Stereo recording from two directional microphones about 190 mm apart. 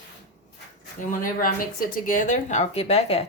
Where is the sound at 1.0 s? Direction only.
45° left (ahead or behind).